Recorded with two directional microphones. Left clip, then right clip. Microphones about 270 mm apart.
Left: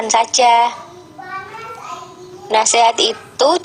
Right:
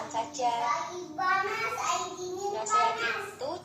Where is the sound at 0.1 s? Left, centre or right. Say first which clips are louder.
Left 19 dB; left.